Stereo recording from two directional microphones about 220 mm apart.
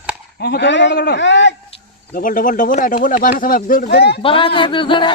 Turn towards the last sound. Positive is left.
turn(degrees=20)  # may be behind; listen again after turning